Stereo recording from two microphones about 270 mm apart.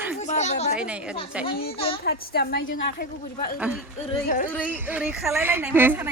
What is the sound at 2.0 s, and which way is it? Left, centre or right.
Speech, left.